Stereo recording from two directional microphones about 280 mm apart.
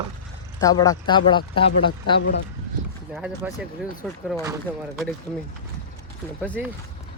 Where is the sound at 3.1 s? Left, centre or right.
Centre.